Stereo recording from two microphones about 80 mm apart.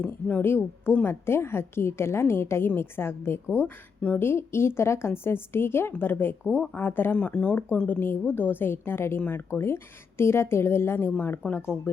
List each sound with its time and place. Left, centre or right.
0.0 s a woman's voice: centre
7.2 s a woman's voice: centre
11.4 s speech: centre